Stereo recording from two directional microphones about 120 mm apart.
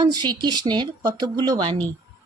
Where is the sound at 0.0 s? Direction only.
35° right (ahead or behind).